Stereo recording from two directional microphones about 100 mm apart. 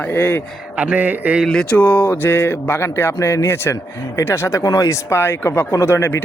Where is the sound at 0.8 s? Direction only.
15° right (ahead or behind).